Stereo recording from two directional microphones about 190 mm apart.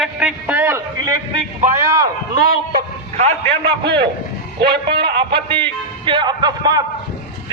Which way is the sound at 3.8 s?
25° right (ahead or behind).